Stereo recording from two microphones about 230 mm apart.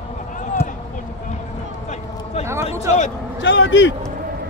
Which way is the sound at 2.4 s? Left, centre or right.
Left.